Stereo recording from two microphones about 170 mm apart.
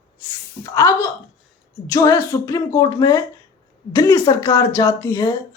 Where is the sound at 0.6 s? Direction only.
20° left (ahead or behind).